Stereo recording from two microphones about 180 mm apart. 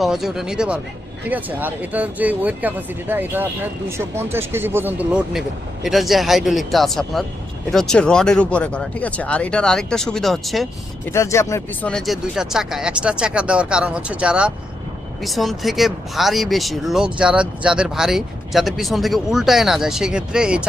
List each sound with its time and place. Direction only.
0.0 s speech: centre (ahead or behind)
11.1 s speech: 15° left (ahead or behind)
11.9 s speech: centre (ahead or behind)